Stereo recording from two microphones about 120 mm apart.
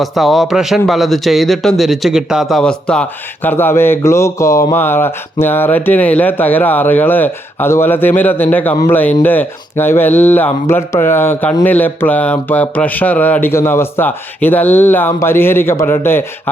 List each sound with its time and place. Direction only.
0.0 s speech: centre (ahead or behind); by 16.2 s 20° left (ahead or behind)